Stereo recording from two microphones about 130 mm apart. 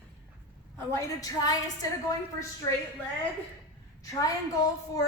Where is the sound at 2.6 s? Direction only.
30° left (ahead or behind).